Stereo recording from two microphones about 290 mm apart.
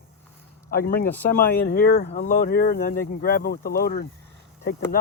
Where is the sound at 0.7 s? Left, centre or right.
Left.